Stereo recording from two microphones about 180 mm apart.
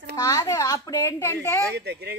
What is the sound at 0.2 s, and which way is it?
Speech, 20° left (ahead or behind).